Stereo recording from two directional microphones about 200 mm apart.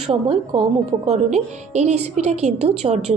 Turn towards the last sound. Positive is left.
turn(degrees=-35)  # may be behind; listen again after turning